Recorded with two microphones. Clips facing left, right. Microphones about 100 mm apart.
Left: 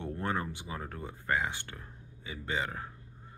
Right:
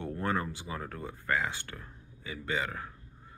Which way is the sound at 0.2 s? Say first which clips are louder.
Right 2 dB; 20° left (ahead or behind).